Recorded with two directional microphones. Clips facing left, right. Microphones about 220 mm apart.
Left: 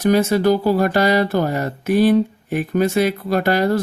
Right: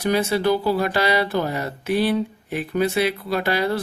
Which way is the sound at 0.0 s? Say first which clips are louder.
Left 5 dB; 45° left (ahead or behind).